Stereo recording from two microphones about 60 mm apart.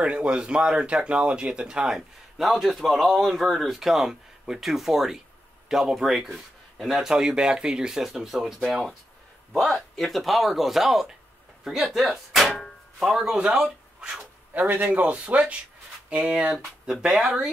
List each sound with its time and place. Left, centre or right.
0.0 s speech: centre
9.5 s speech: centre
14.5 s a man's voice: right; by 17.5 s centre